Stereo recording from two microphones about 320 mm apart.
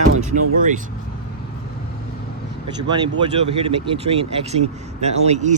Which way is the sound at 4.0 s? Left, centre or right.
Centre.